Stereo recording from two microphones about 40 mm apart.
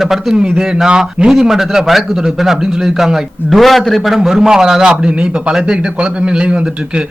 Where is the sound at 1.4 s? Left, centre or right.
Centre.